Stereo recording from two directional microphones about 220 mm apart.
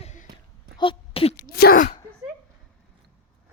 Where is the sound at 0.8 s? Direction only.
25° left (ahead or behind).